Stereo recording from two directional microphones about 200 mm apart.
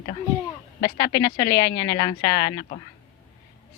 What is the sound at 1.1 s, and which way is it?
Speech, 15° left (ahead or behind).